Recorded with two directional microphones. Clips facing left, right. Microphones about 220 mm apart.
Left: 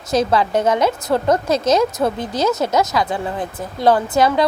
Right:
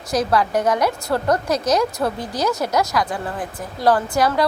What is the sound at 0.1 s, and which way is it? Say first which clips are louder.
A woman's voice: left 2 dB; 25° left (ahead or behind).